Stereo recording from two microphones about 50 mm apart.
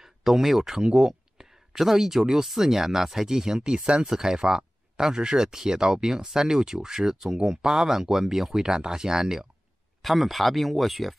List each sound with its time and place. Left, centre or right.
0.0 s speech: centre